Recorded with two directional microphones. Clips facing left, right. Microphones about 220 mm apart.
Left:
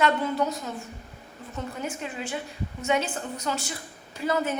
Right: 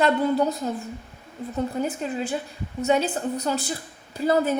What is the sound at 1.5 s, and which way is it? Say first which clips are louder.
A woman's voice: right 7 dB; 35° right (ahead or behind).